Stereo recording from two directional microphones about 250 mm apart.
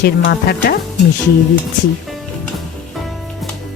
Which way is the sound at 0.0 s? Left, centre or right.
Left.